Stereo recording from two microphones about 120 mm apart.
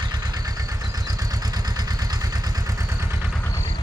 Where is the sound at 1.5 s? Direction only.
35° right (ahead or behind).